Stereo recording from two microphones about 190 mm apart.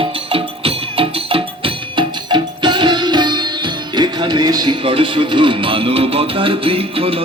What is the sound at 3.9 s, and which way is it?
Speech, 25° right (ahead or behind).